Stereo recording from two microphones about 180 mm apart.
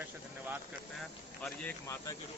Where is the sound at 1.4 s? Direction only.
5° left (ahead or behind).